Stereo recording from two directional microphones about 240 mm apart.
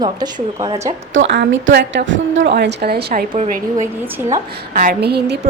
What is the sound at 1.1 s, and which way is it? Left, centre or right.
A woman's voice, right.